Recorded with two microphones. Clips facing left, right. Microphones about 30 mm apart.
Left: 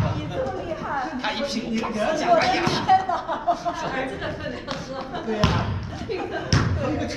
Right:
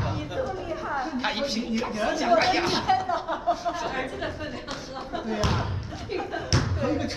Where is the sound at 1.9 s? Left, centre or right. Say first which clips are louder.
Left 3 dB; centre.